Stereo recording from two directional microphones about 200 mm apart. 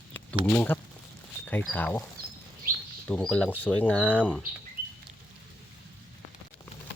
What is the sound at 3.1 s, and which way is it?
Speech, 5° left (ahead or behind).